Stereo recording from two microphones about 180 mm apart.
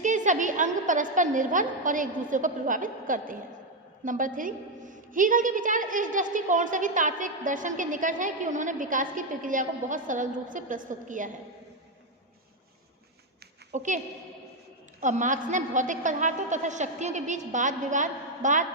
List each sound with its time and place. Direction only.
0.0 s a woman's voice: 45° right (ahead or behind)
13.7 s a woman's voice: 45° right (ahead or behind)
15.0 s a woman's voice: 45° right (ahead or behind)